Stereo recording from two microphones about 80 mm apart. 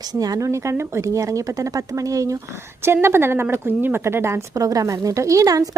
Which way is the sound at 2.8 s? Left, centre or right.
Right.